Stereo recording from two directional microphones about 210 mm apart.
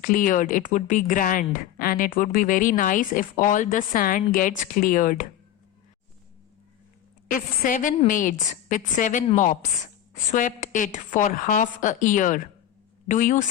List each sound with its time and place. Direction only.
0.0 s speech: 40° left (ahead or behind)
7.3 s speech: 40° left (ahead or behind)